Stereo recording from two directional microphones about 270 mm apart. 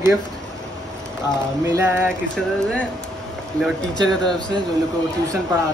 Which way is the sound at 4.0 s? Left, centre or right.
Centre.